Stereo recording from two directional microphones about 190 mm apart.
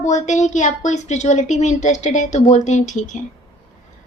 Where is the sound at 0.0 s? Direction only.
40° left (ahead or behind).